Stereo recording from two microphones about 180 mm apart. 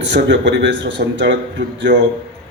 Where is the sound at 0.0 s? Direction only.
75° right (ahead or behind).